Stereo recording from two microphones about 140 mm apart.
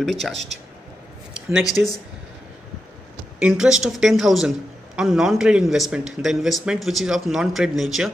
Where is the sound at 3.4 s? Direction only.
5° right (ahead or behind).